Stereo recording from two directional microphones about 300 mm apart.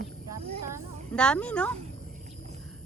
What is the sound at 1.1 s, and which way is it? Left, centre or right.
Speech, centre.